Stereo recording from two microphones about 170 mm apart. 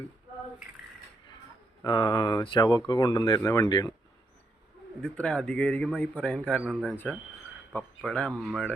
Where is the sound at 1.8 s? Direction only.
25° left (ahead or behind).